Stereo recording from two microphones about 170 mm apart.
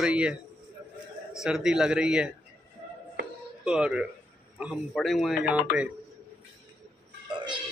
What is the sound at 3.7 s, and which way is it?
A man's voice, 5° right (ahead or behind).